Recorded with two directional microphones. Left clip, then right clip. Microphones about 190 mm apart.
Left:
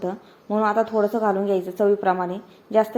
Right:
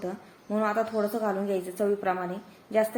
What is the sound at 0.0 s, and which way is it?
A woman's voice, 15° left (ahead or behind).